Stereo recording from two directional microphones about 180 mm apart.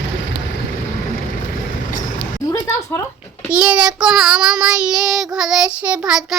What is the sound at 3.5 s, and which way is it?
Child singing, 5° right (ahead or behind).